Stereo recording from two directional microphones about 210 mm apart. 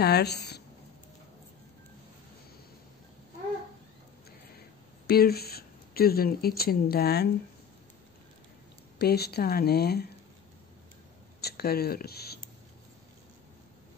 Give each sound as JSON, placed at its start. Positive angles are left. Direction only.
{"t": 0.0, "sound": "speech", "side_deg": 50}
{"t": 5.0, "sound": "speech", "side_deg": 45}
{"t": 8.9, "sound": "speech", "side_deg": 50}
{"t": 11.4, "sound": "speech", "side_deg": 50}